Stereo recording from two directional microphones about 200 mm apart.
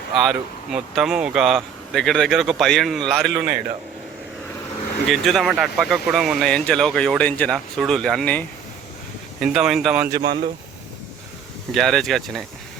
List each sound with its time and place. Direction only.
0.3 s speech: centre (ahead or behind)
3.3 s speech: 25° right (ahead or behind)
5.0 s speech: centre (ahead or behind)
10.1 s speech: 25° right (ahead or behind)
11.7 s speech: centre (ahead or behind)